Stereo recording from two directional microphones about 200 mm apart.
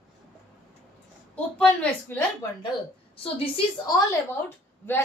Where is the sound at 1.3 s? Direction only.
5° left (ahead or behind).